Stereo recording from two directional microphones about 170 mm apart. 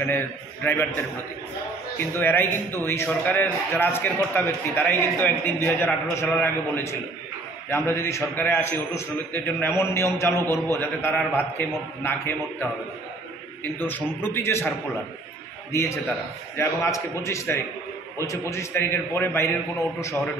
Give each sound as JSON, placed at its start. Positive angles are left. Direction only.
{"t": 0.6, "sound": "a man's voice", "side_deg": 10}
{"t": 2.1, "sound": "a man's voice", "side_deg": 10}
{"t": 13.7, "sound": "a man's voice", "side_deg": 10}
{"t": 15.7, "sound": "a man's voice", "side_deg": 15}